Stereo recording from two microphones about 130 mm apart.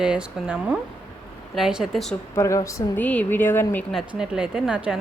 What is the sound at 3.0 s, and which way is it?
Speech, 10° left (ahead or behind).